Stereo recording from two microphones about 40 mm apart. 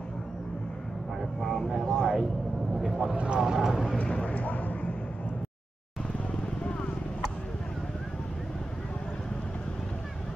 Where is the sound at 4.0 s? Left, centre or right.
Left.